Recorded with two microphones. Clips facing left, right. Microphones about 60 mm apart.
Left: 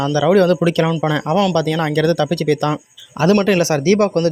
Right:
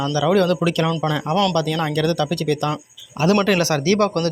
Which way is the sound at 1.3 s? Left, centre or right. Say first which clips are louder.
Left 3 dB; centre.